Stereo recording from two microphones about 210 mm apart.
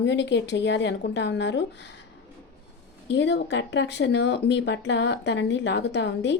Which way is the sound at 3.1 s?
55° left (ahead or behind).